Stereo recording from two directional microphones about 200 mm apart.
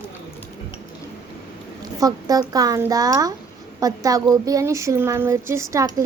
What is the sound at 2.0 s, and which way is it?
Speech, 15° right (ahead or behind).